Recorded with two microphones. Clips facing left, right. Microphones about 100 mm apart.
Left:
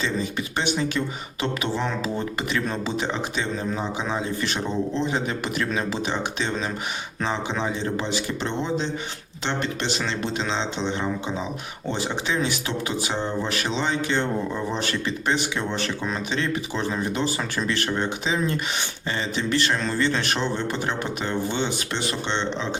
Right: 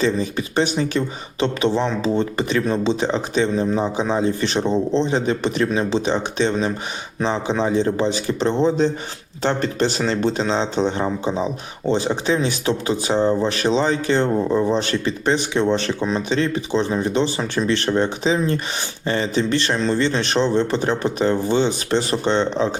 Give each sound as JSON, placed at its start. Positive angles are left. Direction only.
{"t": 0.0, "sound": "speech", "side_deg": -35}